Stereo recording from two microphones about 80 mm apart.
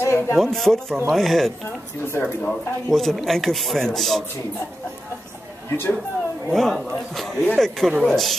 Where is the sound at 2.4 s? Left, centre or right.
Centre.